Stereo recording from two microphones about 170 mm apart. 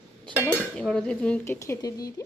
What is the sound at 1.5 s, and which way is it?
Speech, 15° left (ahead or behind).